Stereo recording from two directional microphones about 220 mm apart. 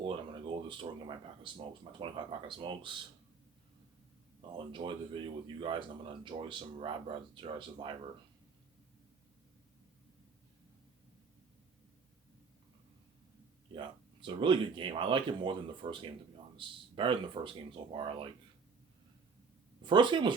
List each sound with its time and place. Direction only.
0.0 s speech: 20° right (ahead or behind)
4.5 s speech: 20° right (ahead or behind)
13.7 s speech: 20° right (ahead or behind)
19.8 s speech: 20° right (ahead or behind)